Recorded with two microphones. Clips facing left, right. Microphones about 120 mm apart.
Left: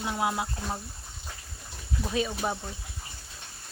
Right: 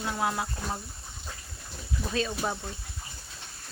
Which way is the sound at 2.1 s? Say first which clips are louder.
Left 1 dB; 10° left (ahead or behind).